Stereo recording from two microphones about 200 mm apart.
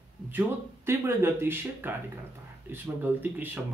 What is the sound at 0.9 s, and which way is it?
Speech, 10° right (ahead or behind).